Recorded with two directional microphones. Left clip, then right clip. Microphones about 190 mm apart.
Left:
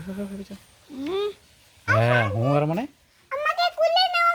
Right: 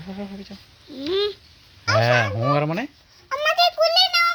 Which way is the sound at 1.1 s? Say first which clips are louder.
Right 4 dB; 25° right (ahead or behind).